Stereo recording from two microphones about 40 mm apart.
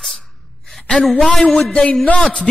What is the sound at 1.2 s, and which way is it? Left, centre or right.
Speech, centre.